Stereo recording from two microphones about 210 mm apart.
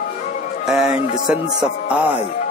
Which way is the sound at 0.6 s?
5° right (ahead or behind).